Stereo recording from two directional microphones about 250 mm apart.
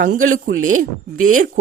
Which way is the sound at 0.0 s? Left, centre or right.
Right.